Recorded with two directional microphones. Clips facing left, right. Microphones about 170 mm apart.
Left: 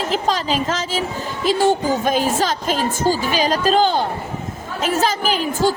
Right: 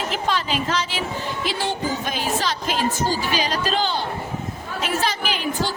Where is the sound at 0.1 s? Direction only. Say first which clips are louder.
Left 5 dB; 40° left (ahead or behind).